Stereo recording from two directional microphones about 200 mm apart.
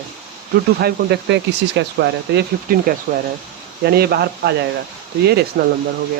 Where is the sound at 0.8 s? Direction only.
60° right (ahead or behind).